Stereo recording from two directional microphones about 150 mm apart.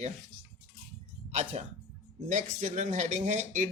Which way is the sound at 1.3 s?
50° right (ahead or behind).